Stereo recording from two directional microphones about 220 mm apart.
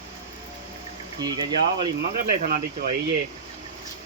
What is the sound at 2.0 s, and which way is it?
Speech, 40° right (ahead or behind).